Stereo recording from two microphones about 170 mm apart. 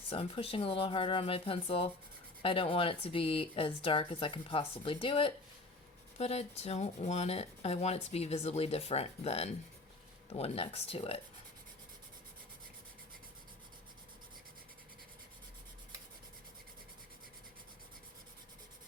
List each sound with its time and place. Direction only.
0.1 s speech: 35° left (ahead or behind)